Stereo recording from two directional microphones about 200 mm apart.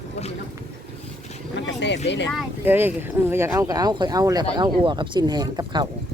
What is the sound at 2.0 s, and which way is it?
Speech, 60° left (ahead or behind).